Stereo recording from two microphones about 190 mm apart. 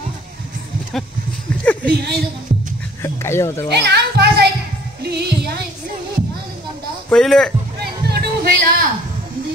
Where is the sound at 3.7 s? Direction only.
60° right (ahead or behind).